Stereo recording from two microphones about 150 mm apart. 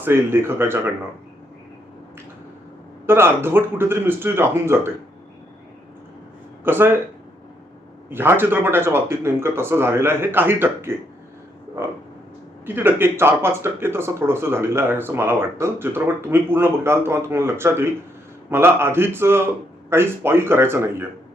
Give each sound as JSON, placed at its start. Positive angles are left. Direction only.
{"t": 0.0, "sound": "speech", "side_deg": -15}
{"t": 3.1, "sound": "speech", "side_deg": -15}
{"t": 6.7, "sound": "speech", "side_deg": -15}
{"t": 8.1, "sound": "speech", "side_deg": -15}
{"t": 12.6, "sound": "speech", "side_deg": -15}